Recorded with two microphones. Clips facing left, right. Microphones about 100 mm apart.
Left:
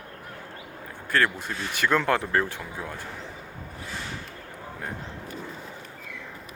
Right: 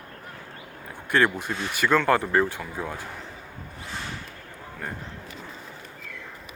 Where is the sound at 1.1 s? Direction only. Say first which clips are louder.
Right 2 dB; 20° right (ahead or behind).